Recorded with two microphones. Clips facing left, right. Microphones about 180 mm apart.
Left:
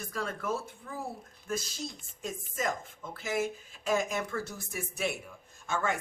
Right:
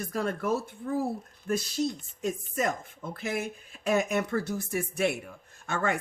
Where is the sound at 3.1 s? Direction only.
60° right (ahead or behind).